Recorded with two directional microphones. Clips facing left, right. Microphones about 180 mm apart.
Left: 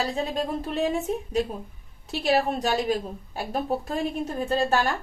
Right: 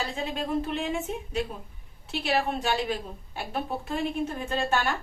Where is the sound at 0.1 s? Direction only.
40° left (ahead or behind).